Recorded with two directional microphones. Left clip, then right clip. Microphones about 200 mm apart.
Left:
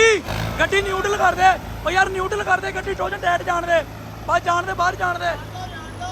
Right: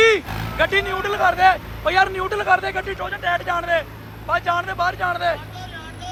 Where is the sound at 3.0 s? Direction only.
25° left (ahead or behind); by 5.4 s 10° left (ahead or behind).